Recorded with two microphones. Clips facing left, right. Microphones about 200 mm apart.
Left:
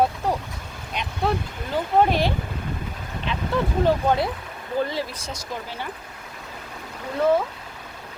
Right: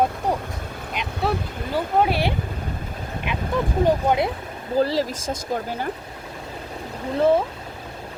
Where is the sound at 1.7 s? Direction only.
10° right (ahead or behind).